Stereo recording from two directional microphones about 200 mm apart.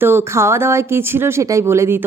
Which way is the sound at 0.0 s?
10° right (ahead or behind).